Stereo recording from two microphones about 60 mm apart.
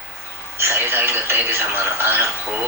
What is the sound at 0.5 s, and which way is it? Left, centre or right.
Speech, right.